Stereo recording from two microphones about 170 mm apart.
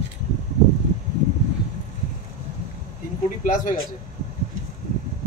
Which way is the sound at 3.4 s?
50° left (ahead or behind).